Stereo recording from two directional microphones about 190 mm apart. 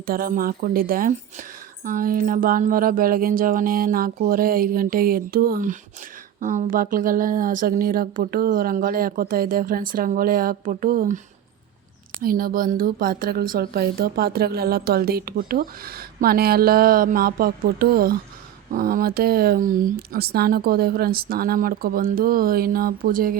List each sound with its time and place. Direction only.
0.0 s speech: 50° right (ahead or behind)
12.2 s speech: 50° right (ahead or behind)